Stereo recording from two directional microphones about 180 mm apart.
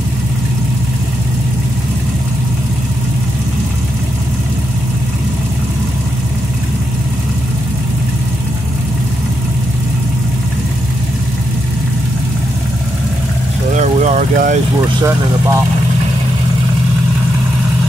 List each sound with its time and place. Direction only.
13.7 s vehicle: 40° right (ahead or behind)